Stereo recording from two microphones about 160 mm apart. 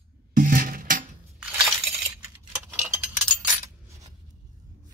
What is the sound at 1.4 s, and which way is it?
Coin, 5° right (ahead or behind).